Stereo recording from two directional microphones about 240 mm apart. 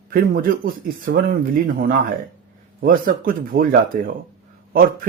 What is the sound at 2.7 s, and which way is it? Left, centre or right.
Speech, right.